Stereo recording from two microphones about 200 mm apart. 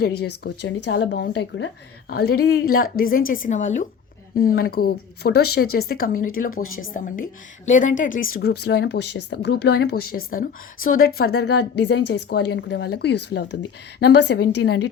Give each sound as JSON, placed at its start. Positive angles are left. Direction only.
{"t": 0.0, "sound": "a woman's voice", "side_deg": 55}
{"t": 2.0, "sound": "a woman's voice", "side_deg": 50}
{"t": 6.5, "sound": "a woman's voice", "side_deg": 90}
{"t": 6.9, "sound": "a woman's voice", "side_deg": 45}
{"t": 8.4, "sound": "a woman's voice", "side_deg": 55}
{"t": 10.8, "sound": "a woman's voice", "side_deg": 90}
{"t": 11.0, "sound": "a woman's voice", "side_deg": 50}